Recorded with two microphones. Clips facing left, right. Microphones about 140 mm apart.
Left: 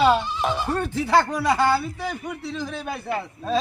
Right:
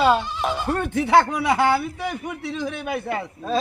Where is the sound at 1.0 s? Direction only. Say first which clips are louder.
Right 2 dB; 20° right (ahead or behind).